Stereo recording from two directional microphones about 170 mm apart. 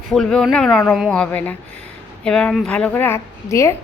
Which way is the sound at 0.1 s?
Centre (ahead or behind).